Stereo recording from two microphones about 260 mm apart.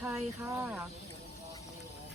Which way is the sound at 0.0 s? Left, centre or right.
Centre.